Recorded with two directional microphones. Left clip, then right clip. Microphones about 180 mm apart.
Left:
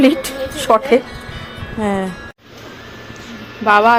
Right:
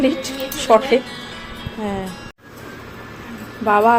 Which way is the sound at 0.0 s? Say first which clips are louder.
Left 5 dB; 35° left (ahead or behind).